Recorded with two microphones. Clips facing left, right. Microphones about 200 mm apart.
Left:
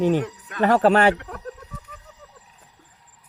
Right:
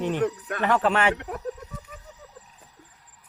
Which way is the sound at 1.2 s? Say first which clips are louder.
Right 3 dB; 20° right (ahead or behind).